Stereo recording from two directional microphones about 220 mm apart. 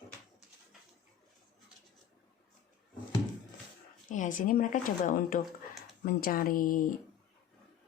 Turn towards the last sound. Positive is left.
turn(degrees=40)  # may be behind; listen again after turning